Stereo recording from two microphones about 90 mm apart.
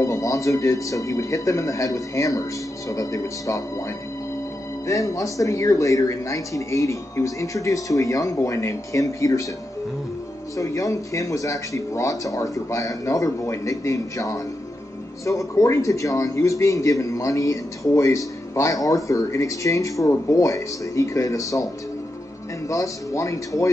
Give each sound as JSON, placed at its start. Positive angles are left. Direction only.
{"t": 0.0, "sound": "a man's voice", "side_deg": 35}
{"t": 10.5, "sound": "a man's voice", "side_deg": 35}
{"t": 22.7, "sound": "a man's voice", "side_deg": 35}